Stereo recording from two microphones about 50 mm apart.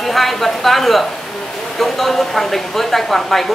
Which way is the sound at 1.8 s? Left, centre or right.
Centre.